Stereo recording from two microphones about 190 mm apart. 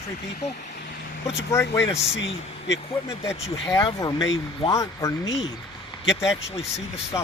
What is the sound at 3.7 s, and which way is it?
Speech, 20° left (ahead or behind).